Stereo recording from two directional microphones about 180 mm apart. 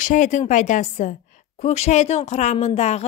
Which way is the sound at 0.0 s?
45° left (ahead or behind).